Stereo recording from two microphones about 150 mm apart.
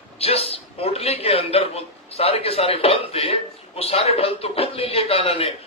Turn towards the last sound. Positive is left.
turn(degrees=40)  # may be behind; listen again after turning